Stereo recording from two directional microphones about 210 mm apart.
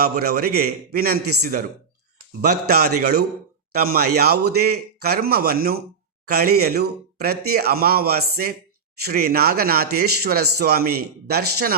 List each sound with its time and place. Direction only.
0.0 s speech: 50° right (ahead or behind)